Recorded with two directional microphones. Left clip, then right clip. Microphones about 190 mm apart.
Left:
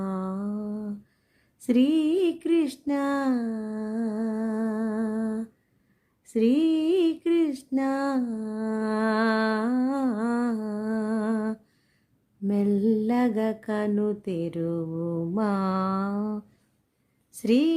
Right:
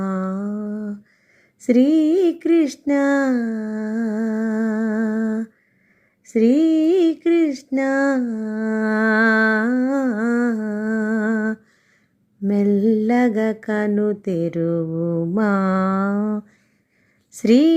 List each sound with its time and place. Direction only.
0.0 s humming: 15° right (ahead or behind)
1.6 s mantra: 15° right (ahead or behind)
6.2 s a sound: 15° right (ahead or behind)
12.5 s mantra: 15° right (ahead or behind)
17.4 s a woman's voice: 20° right (ahead or behind)